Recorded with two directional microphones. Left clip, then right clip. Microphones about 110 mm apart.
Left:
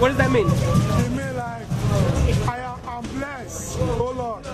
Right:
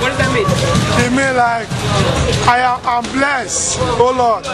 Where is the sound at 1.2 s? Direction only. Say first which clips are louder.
Right 16 dB; 30° right (ahead or behind).